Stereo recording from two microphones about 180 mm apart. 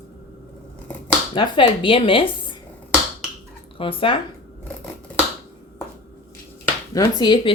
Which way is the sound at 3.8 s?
30° left (ahead or behind).